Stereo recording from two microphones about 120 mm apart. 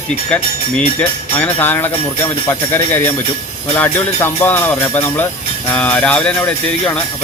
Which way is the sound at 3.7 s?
20° left (ahead or behind).